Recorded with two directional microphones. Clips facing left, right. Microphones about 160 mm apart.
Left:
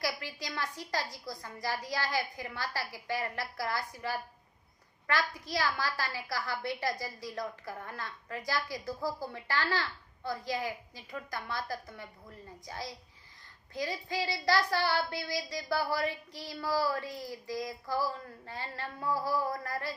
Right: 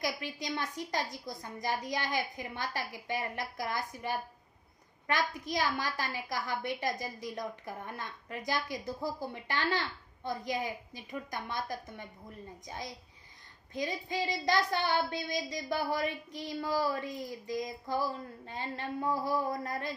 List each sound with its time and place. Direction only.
0.0 s child singing: 20° right (ahead or behind)